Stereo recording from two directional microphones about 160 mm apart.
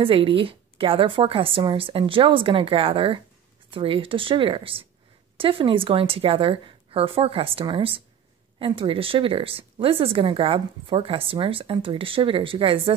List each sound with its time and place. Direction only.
0.0 s speech: 35° right (ahead or behind)